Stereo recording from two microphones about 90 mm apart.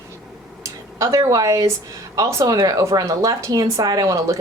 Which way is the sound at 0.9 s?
40° right (ahead or behind).